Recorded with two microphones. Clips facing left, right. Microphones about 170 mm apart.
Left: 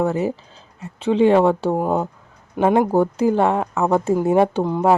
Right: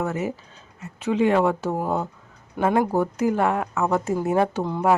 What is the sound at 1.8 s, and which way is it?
Speech, 15° left (ahead or behind).